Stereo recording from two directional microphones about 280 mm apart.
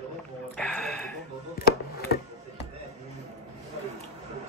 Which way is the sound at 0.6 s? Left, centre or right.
Centre.